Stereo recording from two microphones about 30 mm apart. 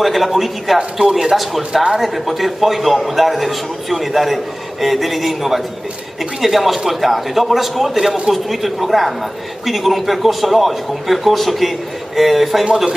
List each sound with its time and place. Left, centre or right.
0.0 s a man's voice: centre
1.7 s speech: centre
2.2 s a man's voice: centre